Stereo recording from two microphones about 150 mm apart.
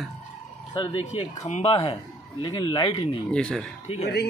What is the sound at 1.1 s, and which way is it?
A man's voice, 45° left (ahead or behind).